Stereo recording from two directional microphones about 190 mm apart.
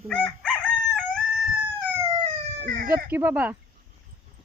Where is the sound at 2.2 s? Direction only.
30° right (ahead or behind).